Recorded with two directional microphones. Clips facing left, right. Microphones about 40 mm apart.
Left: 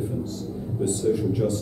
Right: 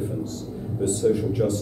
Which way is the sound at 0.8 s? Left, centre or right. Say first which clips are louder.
Right 2 dB; right.